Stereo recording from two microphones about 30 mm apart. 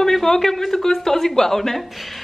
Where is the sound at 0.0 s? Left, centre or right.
Centre.